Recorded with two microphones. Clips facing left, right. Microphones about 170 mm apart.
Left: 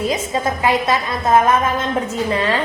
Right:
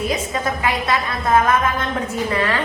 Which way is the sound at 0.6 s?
25° left (ahead or behind).